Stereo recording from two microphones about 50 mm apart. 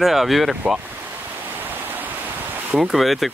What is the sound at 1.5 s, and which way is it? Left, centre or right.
Stream, right.